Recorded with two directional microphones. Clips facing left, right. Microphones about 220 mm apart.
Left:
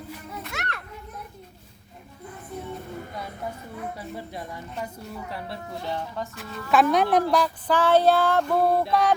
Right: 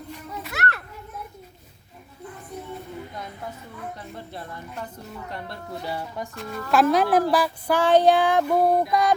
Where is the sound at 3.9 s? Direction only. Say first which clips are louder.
Left 2 dB; 10° left (ahead or behind).